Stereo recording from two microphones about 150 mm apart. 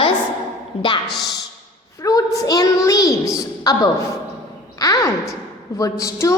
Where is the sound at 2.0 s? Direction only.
20° left (ahead or behind).